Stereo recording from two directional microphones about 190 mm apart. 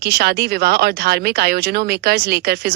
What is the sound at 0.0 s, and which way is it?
Speech, 60° right (ahead or behind).